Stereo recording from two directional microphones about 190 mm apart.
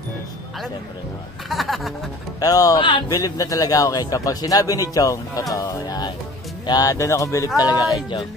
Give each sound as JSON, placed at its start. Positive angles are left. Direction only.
{"t": 1.5, "sound": "speech", "side_deg": 0}
{"t": 2.4, "sound": "a man's voice", "side_deg": 20}